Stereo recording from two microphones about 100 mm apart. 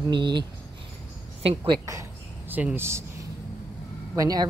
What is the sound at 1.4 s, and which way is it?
Speech, 55° right (ahead or behind).